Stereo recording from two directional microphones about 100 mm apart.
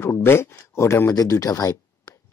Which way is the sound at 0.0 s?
25° left (ahead or behind).